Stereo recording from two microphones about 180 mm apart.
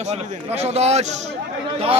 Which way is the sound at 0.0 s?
35° right (ahead or behind).